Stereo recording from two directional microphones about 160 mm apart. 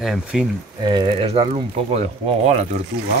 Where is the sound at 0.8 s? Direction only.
30° right (ahead or behind); by 2.6 s 45° right (ahead or behind).